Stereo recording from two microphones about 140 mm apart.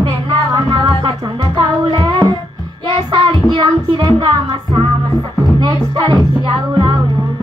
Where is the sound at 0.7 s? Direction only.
35° right (ahead or behind).